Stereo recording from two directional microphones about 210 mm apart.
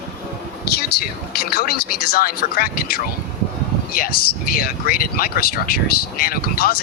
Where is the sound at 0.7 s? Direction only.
50° left (ahead or behind).